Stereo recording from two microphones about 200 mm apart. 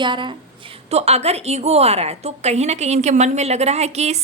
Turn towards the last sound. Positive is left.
turn(degrees=-35)  # may be behind; listen again after turning